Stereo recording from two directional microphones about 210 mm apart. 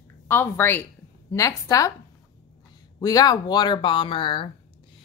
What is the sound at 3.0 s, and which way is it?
A woman's voice, 20° left (ahead or behind).